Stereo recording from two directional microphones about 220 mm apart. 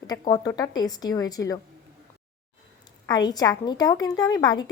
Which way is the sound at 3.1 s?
20° left (ahead or behind).